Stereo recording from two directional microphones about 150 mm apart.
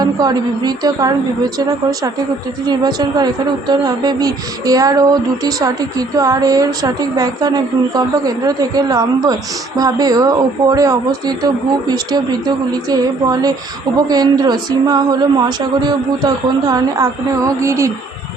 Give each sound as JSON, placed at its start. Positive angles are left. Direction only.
{"t": 0.0, "sound": "female singing", "side_deg": -25}
{"t": 2.6, "sound": "female singing", "side_deg": -25}